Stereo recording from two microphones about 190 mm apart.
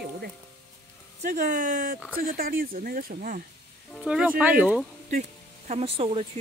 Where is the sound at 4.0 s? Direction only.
5° right (ahead or behind).